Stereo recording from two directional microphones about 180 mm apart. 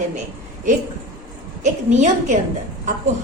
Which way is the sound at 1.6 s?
40° right (ahead or behind).